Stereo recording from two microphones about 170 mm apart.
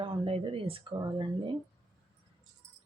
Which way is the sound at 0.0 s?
30° right (ahead or behind).